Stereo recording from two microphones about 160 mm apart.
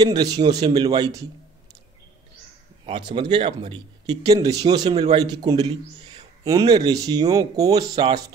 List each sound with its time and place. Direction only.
0.0 s speech: 25° right (ahead or behind)
2.8 s speech: 30° right (ahead or behind)